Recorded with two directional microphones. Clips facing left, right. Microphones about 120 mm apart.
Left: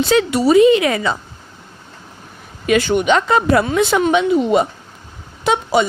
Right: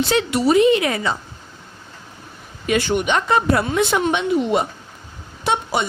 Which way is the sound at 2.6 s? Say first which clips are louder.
Left 5 dB; 90° left.